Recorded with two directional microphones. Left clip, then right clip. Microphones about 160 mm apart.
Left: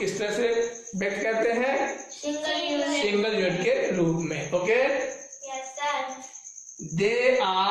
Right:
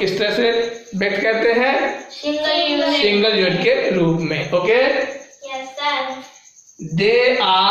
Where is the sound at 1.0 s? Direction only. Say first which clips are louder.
Right 8 dB; 10° right (ahead or behind).